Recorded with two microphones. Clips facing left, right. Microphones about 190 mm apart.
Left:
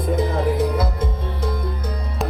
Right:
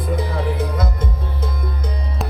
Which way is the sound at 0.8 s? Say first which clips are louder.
Left 1 dB; 10° left (ahead or behind).